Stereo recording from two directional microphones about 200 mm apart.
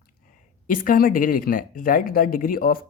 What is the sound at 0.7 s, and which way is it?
Speech, 45° left (ahead or behind).